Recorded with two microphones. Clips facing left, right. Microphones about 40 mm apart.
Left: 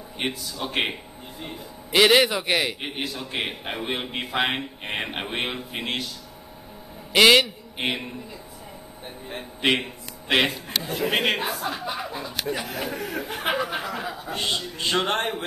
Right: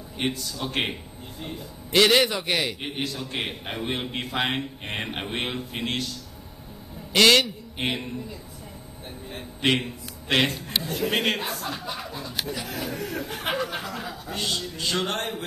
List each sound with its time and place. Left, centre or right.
0.2 s a man's voice: centre
9.6 s a man's voice: centre